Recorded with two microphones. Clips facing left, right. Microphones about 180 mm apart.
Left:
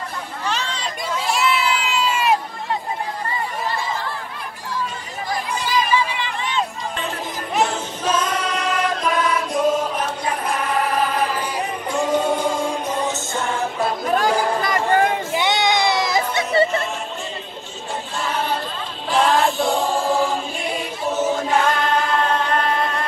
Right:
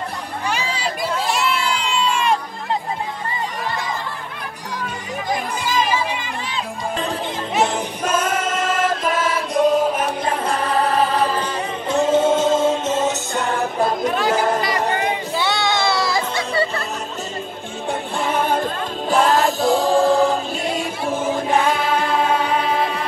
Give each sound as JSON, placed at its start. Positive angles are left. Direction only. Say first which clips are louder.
{"t": 0.5, "sound": "a sound", "louder": "right 2 dB", "side_deg": -10}
{"t": 5.7, "sound": "music", "louder": "even", "side_deg": -45}
{"t": 7.6, "sound": "choir", "louder": "even", "side_deg": -15}
{"t": 11.9, "sound": "music", "louder": "right 4 dB", "side_deg": -20}
{"t": 14.1, "sound": "music", "louder": "even", "side_deg": 45}
{"t": 14.8, "sound": "music", "louder": "left 4 dB", "side_deg": -20}
{"t": 15.3, "sound": "music", "louder": "even", "side_deg": 20}
{"t": 18.3, "sound": "a sound", "louder": "right 5 dB", "side_deg": -50}
{"t": 19.2, "sound": "music", "louder": "left 1 dB", "side_deg": 0}
{"t": 19.7, "sound": "choir", "louder": "right 5 dB", "side_deg": -35}
{"t": 21.6, "sound": "music", "louder": "right 1 dB", "side_deg": -5}